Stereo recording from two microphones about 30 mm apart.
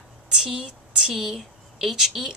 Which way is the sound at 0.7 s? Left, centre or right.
Centre.